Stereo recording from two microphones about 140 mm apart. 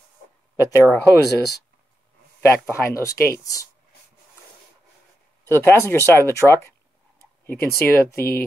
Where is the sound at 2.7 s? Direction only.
20° left (ahead or behind).